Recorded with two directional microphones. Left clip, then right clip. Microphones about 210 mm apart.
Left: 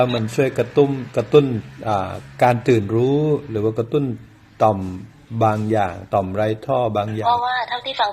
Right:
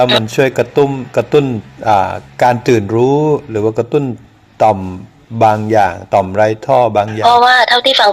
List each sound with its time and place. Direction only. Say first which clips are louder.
0.3 s a man's voice: right 7 dB; centre (ahead or behind)
5.4 s a man's voice: right 9 dB; centre (ahead or behind)
7.2 s speech: right 13 dB; 50° right (ahead or behind)